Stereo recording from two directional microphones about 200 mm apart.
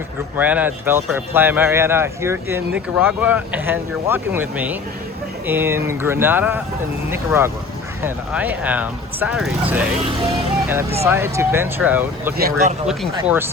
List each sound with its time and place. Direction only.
0.3 s speech: 10° right (ahead or behind)
11.0 s speech: 15° right (ahead or behind)
12.4 s speech: 50° right (ahead or behind)
12.9 s speech: 5° right (ahead or behind)